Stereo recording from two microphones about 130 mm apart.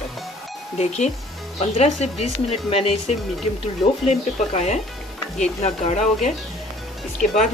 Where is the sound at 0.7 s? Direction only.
55° left (ahead or behind).